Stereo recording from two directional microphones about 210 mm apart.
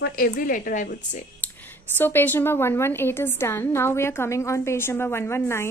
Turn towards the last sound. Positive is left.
turn(degrees=10)  # may be behind; listen again after turning